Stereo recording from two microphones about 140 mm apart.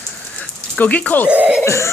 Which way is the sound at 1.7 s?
20° left (ahead or behind).